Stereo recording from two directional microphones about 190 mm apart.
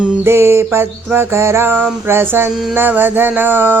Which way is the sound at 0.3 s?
15° right (ahead or behind).